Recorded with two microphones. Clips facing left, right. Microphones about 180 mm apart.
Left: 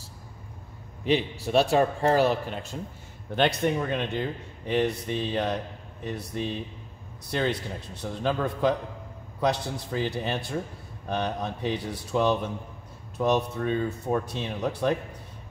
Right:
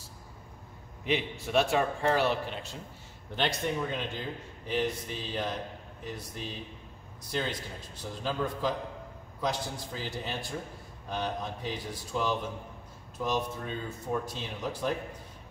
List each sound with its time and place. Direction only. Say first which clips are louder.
1.0 s a man's voice: left 6 dB; 35° left (ahead or behind)
3.3 s speech: left 6 dB; 60° left (ahead or behind)